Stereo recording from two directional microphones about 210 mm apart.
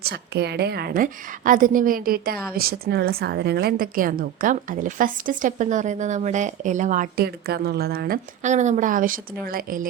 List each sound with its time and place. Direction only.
0.0 s a woman's voice: 50° right (ahead or behind)